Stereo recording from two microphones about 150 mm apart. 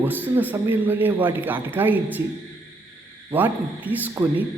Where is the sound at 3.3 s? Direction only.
10° right (ahead or behind).